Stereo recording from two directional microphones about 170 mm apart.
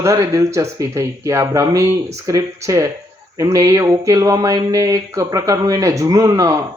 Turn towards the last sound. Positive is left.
turn(degrees=-20)  # may be behind; listen again after turning